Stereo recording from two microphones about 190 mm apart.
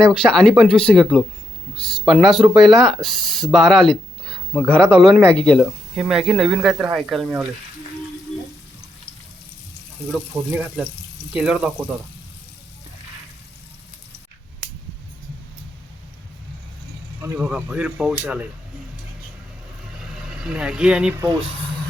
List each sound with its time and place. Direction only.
0.0 s speech: 5° left (ahead or behind)
10.1 s speech: 5° right (ahead or behind)
17.2 s speech: 5° right (ahead or behind)
20.4 s speech: 5° right (ahead or behind)